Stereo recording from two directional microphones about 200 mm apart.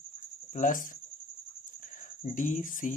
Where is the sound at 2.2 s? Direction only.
40° left (ahead or behind).